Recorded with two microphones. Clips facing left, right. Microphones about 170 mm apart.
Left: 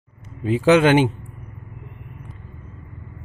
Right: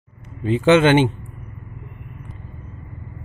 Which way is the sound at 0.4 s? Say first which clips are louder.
Right 1 dB; 5° left (ahead or behind).